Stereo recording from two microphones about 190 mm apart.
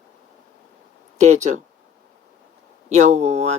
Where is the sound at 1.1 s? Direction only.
40° right (ahead or behind).